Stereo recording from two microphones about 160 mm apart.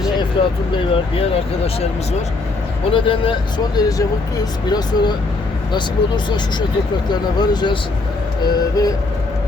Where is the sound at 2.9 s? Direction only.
35° left (ahead or behind).